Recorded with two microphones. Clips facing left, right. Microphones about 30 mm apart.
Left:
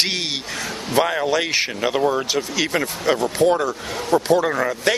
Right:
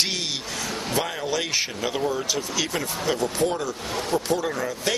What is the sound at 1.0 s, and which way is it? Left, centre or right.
Speech, left.